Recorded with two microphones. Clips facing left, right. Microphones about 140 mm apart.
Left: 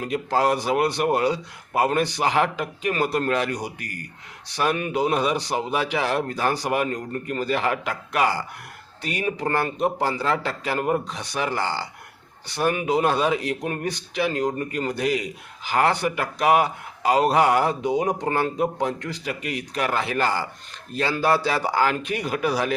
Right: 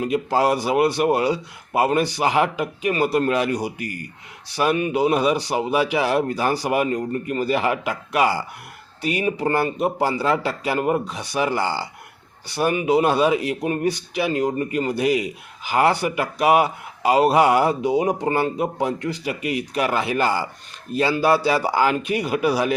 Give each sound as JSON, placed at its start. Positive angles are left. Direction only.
{"t": 0.0, "sound": "speech", "side_deg": -10}